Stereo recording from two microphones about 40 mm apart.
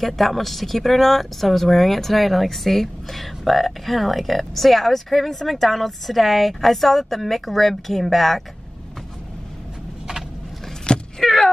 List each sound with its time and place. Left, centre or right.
0.0 s speech: centre
10.9 s vehicle: left
11.2 s a sound: centre